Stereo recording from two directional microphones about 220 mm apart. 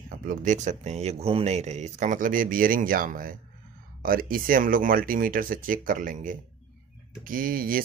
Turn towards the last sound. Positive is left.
turn(degrees=-40)  # may be behind; listen again after turning